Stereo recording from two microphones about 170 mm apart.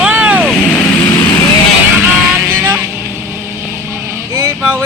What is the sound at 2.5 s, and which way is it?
Vehicle, 10° right (ahead or behind).